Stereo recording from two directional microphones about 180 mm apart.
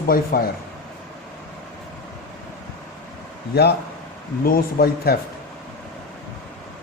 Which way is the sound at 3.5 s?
65° left (ahead or behind).